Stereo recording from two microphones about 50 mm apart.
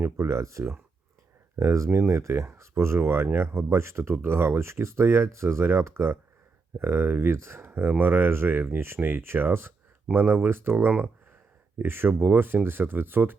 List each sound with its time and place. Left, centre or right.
0.0 s speech: right
1.6 s speech: right
7.7 s speech: right